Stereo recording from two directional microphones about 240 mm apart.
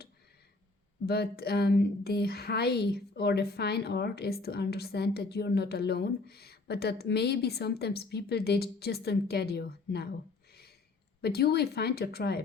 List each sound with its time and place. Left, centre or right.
1.0 s speech: left
11.2 s speech: left